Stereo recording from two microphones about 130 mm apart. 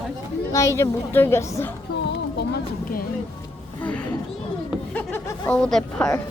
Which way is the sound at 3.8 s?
10° left (ahead or behind).